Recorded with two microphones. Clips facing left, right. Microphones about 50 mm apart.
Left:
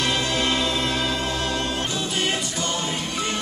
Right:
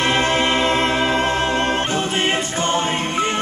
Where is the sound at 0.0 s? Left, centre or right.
Right.